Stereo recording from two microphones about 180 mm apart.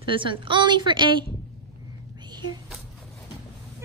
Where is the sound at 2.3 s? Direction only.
25° right (ahead or behind).